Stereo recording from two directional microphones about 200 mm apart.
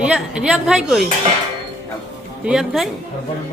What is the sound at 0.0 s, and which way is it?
A man's voice, 5° right (ahead or behind).